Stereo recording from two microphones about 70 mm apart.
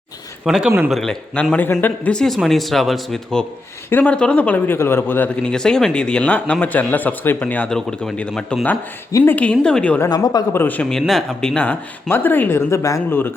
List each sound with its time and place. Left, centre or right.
0.4 s a man's voice: centre
0.9 s speech: centre
1.5 s speech: left
2.0 s speech: centre
4.0 s speech: centre
5.4 s a man's voice: centre
7.7 s a man's voice: centre
10.2 s speech: left
10.5 s speech: left
11.0 s speech: centre
11.3 s a man's voice: centre
12.0 s speech: left